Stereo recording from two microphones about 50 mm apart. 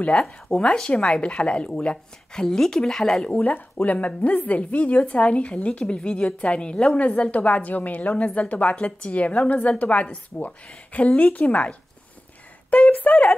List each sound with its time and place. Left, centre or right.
0.1 s a woman's voice: centre
2.4 s speech: centre
3.3 s a woman's voice: left
7.1 s a woman's voice: left
12.7 s speech: left